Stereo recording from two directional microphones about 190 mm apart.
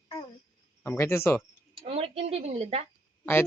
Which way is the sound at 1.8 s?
30° right (ahead or behind).